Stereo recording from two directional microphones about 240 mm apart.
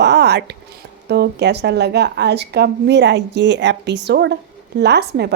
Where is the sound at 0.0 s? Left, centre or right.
Right.